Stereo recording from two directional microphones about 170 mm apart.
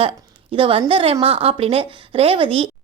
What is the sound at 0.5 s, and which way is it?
A woman's voice, 30° right (ahead or behind).